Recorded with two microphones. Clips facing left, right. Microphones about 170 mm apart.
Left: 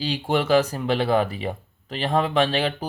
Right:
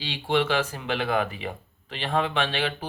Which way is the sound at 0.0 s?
40° left (ahead or behind).